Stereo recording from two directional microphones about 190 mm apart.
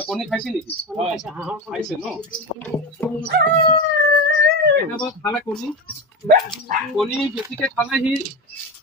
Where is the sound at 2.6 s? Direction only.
10° left (ahead or behind).